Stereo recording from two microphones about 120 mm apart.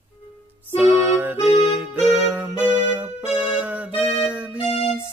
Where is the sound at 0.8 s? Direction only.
15° right (ahead or behind).